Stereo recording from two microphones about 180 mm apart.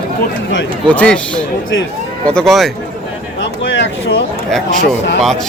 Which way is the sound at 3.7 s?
90° left.